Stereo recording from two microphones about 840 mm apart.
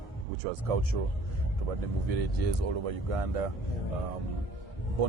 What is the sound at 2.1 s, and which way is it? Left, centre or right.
Speech, right.